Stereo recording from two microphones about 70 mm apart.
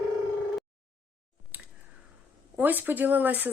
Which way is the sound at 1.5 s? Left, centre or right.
Right.